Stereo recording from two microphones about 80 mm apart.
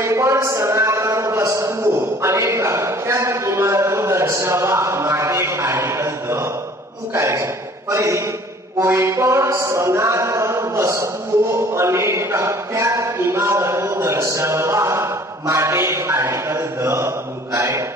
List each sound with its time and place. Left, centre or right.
0.0 s a man's voice: right
8.7 s music: right
17.6 s a man's voice: right